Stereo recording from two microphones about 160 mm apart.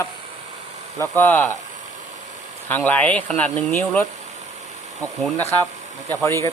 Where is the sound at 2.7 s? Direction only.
10° left (ahead or behind).